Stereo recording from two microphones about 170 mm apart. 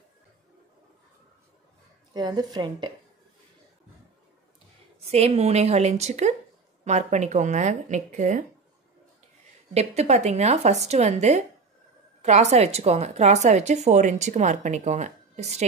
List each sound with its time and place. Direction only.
2.1 s speech: 25° right (ahead or behind)
5.0 s a woman's voice: 35° right (ahead or behind)
9.8 s a woman's voice: 40° right (ahead or behind)